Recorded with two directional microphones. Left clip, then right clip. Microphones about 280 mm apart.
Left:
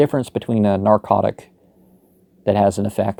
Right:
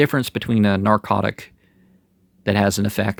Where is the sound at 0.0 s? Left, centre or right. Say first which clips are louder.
Left 1 dB; centre.